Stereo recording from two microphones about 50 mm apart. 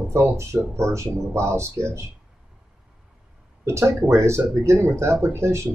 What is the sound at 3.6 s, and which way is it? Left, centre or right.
Speech, right.